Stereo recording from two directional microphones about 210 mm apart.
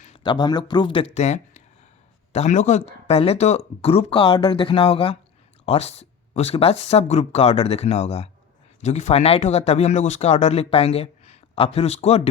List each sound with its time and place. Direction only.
0.2 s speech: 20° left (ahead or behind)